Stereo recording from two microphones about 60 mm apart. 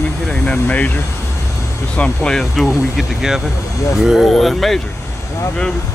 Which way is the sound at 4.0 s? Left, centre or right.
Centre.